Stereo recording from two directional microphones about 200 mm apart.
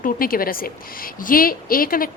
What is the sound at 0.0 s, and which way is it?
A woman's voice, 45° left (ahead or behind).